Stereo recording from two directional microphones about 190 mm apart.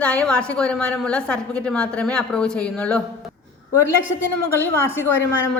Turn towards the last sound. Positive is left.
turn(degrees=10)  # may be behind; listen again after turning